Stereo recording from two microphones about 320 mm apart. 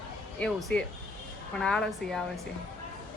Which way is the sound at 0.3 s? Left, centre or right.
Centre.